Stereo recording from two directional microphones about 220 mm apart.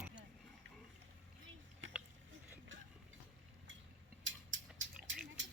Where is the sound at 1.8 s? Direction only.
60° right (ahead or behind).